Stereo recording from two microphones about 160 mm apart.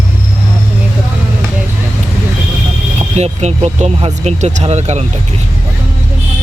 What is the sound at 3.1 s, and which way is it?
Speech, 40° right (ahead or behind).